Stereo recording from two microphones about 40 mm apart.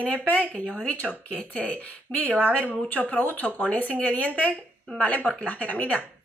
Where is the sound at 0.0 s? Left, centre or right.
Left.